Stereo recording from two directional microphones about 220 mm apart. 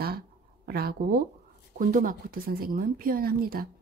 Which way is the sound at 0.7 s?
45° right (ahead or behind).